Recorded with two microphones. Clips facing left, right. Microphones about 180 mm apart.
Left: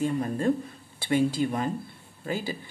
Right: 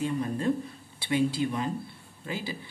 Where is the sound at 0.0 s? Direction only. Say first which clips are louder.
Left 2 dB; 45° left (ahead or behind).